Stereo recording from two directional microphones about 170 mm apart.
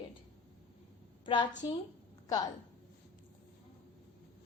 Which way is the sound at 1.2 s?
25° left (ahead or behind).